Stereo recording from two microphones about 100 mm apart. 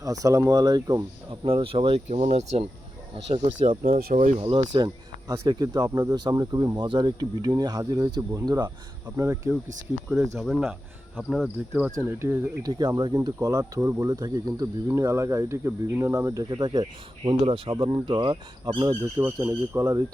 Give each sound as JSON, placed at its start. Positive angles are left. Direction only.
{"t": 0.0, "sound": "speech", "side_deg": -35}
{"t": 1.5, "sound": "speech", "side_deg": -70}
{"t": 3.3, "sound": "speech", "side_deg": -50}
{"t": 3.9, "sound": "speech", "side_deg": -65}
{"t": 4.6, "sound": "speech", "side_deg": -50}
{"t": 9.1, "sound": "speech", "side_deg": -25}
{"t": 10.1, "sound": "speech", "side_deg": -5}
{"t": 11.9, "sound": "speech", "side_deg": -30}
{"t": 12.6, "sound": "speech", "side_deg": -45}
{"t": 19.1, "sound": "speech", "side_deg": -25}